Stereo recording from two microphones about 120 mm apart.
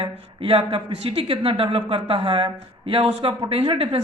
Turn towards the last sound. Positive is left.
turn(degrees=-55)  # may be behind; listen again after turning